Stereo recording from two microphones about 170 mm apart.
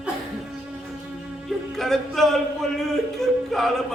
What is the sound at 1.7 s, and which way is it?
Music, centre (ahead or behind).